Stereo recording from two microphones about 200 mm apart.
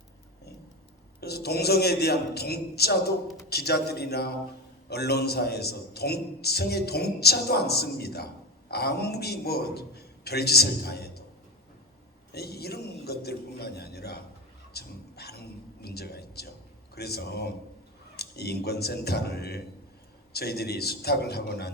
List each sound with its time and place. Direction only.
1.2 s a man's voice: 55° left (ahead or behind)
12.3 s a man's voice: 55° left (ahead or behind)
14.7 s a sound: 55° left (ahead or behind)
16.9 s a man's voice: 55° left (ahead or behind)